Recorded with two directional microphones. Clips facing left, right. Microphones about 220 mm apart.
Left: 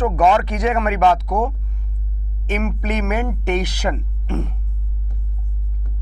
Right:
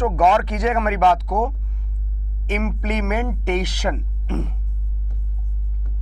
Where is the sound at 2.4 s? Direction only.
15° left (ahead or behind).